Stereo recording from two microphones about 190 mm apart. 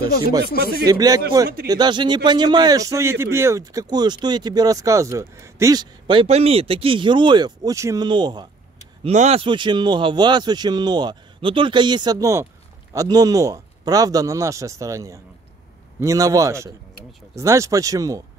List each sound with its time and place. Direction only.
0.8 s a man's voice: 20° right (ahead or behind)
9.0 s a man's voice: 35° right (ahead or behind); by 18.2 s 20° right (ahead or behind)